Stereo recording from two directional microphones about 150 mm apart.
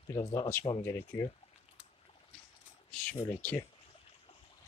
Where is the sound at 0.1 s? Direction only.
25° left (ahead or behind).